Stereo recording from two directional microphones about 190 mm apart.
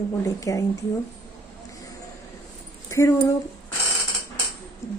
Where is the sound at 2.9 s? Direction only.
15° left (ahead or behind).